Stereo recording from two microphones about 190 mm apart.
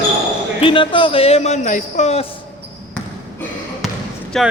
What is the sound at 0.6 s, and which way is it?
Speech, 25° left (ahead or behind).